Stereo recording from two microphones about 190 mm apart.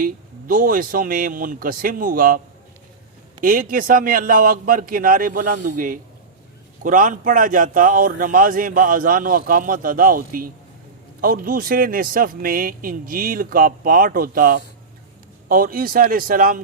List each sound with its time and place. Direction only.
0.0 s a man's voice: 45° right (ahead or behind)
3.4 s a man's voice: 45° right (ahead or behind)